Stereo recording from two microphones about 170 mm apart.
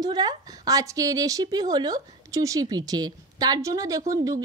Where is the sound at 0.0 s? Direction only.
25° right (ahead or behind).